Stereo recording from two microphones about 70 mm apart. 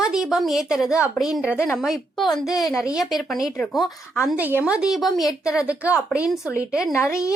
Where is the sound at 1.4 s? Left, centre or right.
Centre.